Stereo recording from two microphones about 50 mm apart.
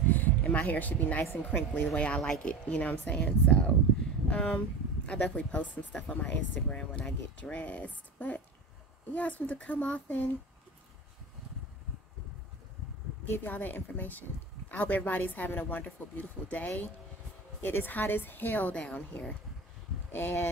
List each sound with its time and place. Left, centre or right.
0.1 s speech: left
2.0 s speech: left
5.9 s speech: centre; by 10.3 s left
13.4 s speech: left
17.6 s speech: left
18.8 s speech: left
20.1 s speech: left